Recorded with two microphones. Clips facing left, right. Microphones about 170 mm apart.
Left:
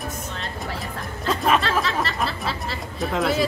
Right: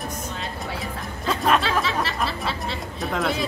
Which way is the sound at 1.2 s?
Centre (ahead or behind).